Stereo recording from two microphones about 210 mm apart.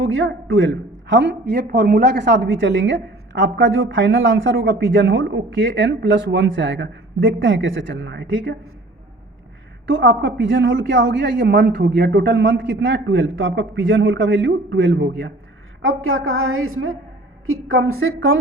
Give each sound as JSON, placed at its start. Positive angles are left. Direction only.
{"t": 0.0, "sound": "a man's voice", "side_deg": -75}
{"t": 9.8, "sound": "a man's voice", "side_deg": -65}
{"t": 15.8, "sound": "a woman's voice", "side_deg": -70}